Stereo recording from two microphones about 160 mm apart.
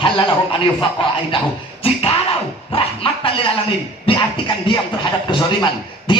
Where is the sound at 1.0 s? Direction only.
35° left (ahead or behind).